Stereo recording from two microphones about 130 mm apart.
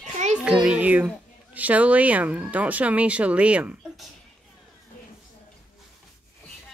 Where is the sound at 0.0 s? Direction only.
65° right (ahead or behind).